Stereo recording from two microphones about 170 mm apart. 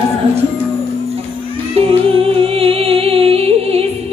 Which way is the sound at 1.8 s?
35° right (ahead or behind).